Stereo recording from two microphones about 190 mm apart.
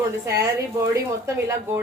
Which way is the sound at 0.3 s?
15° right (ahead or behind).